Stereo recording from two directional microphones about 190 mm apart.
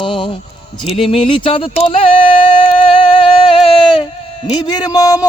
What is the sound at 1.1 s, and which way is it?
Music, 30° left (ahead or behind).